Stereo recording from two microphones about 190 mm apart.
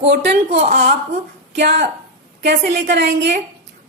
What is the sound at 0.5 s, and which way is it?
Speech, 35° right (ahead or behind).